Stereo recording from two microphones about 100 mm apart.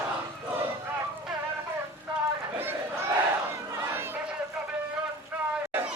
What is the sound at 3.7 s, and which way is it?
Crowd, 25° right (ahead or behind).